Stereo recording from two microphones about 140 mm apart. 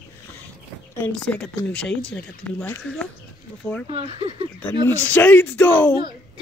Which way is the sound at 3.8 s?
45° right (ahead or behind).